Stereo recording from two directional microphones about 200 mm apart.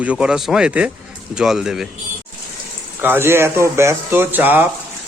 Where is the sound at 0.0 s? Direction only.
5° right (ahead or behind).